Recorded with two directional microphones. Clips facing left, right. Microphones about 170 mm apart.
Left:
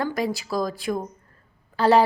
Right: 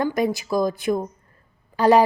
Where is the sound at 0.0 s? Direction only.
20° right (ahead or behind).